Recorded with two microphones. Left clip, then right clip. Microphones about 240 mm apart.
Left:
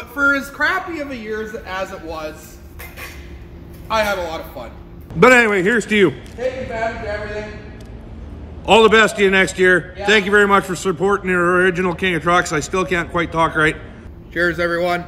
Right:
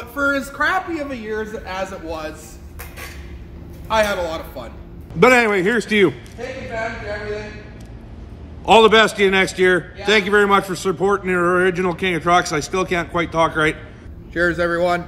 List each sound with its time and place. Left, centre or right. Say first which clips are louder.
0.1 s a woman's voice: left 3 dB; centre
3.9 s a man's voice: even; centre
5.2 s a man's voice: left 2 dB; centre
8.6 s a man's voice: even; centre